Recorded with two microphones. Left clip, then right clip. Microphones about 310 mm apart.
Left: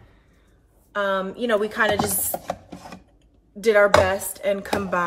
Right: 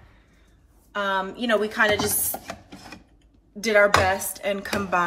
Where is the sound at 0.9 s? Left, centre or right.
Centre.